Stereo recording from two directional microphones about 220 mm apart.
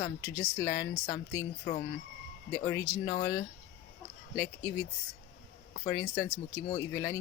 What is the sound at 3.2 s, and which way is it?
A woman's voice, 15° left (ahead or behind).